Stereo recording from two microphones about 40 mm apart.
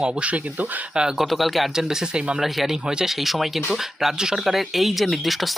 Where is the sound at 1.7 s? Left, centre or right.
Centre.